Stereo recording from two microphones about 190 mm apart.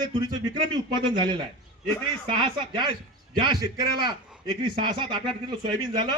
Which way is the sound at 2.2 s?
25° right (ahead or behind).